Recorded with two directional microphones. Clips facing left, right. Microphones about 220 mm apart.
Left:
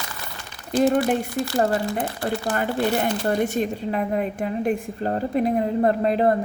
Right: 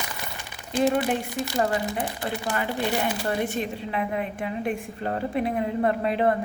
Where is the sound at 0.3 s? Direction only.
15° right (ahead or behind).